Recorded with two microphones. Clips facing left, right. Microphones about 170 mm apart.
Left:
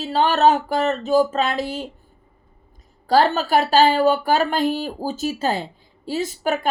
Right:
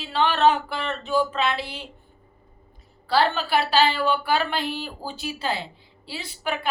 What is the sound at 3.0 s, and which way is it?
A woman's voice, 45° left (ahead or behind).